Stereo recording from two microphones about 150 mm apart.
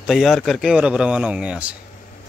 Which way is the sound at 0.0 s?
Centre (ahead or behind).